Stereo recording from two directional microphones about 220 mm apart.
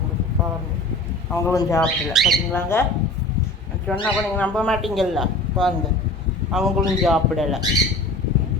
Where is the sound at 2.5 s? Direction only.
10° left (ahead or behind).